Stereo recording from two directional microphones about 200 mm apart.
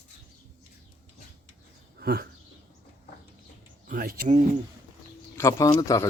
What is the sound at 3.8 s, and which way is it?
Speech, 45° right (ahead or behind).